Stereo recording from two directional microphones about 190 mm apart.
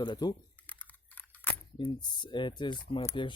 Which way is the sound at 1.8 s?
25° left (ahead or behind).